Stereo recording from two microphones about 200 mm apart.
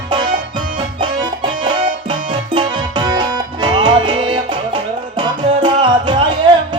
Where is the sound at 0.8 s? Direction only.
20° right (ahead or behind).